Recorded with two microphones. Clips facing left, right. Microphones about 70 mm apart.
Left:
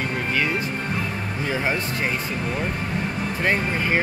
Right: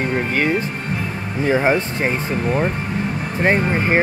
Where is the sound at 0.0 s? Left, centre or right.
Right.